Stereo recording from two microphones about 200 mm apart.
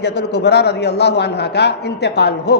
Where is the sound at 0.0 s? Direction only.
55° left (ahead or behind).